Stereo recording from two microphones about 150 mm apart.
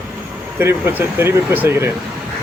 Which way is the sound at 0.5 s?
15° right (ahead or behind).